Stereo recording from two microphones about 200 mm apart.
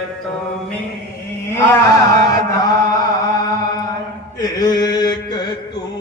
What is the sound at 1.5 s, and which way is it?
Chant, 15° left (ahead or behind).